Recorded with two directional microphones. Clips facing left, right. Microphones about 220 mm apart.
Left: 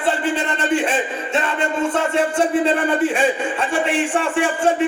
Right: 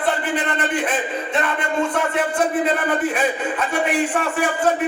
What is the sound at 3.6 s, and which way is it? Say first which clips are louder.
A man's voice: right 1 dB; 30° left (ahead or behind).